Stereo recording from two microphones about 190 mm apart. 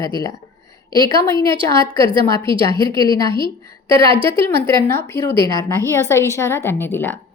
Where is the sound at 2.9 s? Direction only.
15° left (ahead or behind).